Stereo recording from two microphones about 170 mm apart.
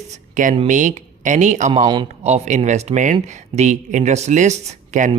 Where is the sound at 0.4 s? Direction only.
50° right (ahead or behind).